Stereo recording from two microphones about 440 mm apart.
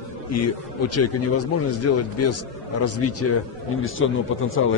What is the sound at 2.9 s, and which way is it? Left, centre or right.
A man's voice, left.